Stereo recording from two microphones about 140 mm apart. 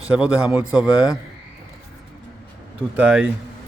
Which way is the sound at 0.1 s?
5° right (ahead or behind).